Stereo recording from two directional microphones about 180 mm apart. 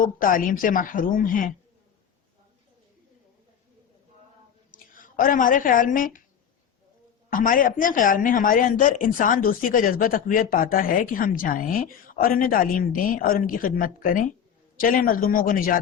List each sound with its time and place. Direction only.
0.0 s speech: 50° left (ahead or behind)
4.7 s a woman's voice: 50° left (ahead or behind)
7.3 s speech: 50° left (ahead or behind)